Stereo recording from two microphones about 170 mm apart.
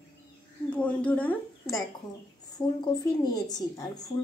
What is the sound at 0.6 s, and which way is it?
A woman's voice, 5° left (ahead or behind).